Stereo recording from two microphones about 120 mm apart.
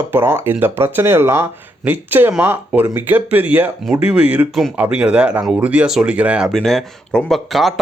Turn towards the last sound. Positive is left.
turn(degrees=0)  # may be behind; listen again after turning